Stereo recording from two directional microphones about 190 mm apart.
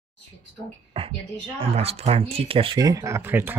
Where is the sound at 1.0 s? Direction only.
30° right (ahead or behind).